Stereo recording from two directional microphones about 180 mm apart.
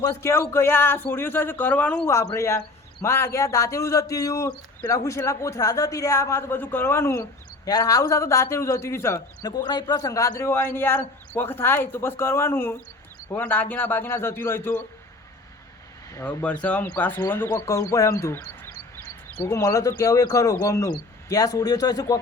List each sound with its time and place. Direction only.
0.0 s a man's voice: 15° left (ahead or behind)
16.1 s a man's voice: 10° left (ahead or behind)